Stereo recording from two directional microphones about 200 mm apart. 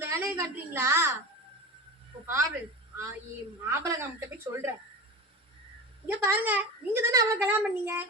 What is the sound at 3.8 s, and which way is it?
Speech, 15° right (ahead or behind).